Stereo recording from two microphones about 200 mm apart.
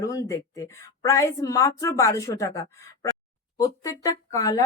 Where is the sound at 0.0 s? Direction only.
15° left (ahead or behind).